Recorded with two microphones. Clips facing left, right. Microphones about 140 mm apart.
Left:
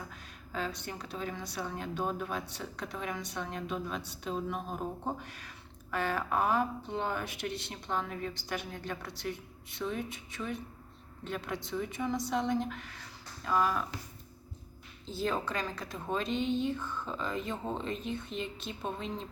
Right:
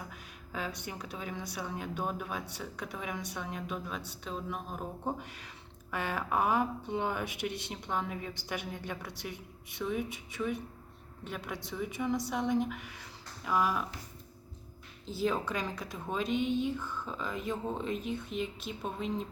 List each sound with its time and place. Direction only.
0.1 s a woman's voice: 15° right (ahead or behind)
5.2 s a woman's voice: 20° right (ahead or behind)
15.0 s a woman's voice: 10° right (ahead or behind)